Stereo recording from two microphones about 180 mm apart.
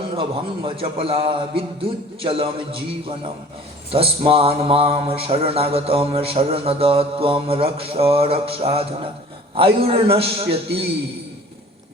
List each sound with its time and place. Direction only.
0.2 s mantra: 30° right (ahead or behind)
3.9 s mantra: 30° right (ahead or behind)